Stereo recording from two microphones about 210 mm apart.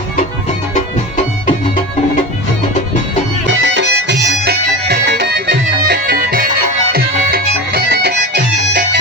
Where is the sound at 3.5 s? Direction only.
55° right (ahead or behind).